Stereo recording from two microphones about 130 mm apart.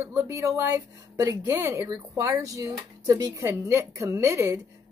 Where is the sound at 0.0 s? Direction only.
25° right (ahead or behind).